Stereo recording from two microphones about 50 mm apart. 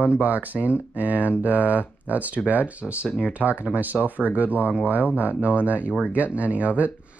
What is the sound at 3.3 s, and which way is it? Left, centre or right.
Speech, right.